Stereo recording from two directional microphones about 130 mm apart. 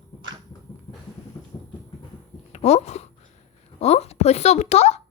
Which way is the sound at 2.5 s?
60° left (ahead or behind).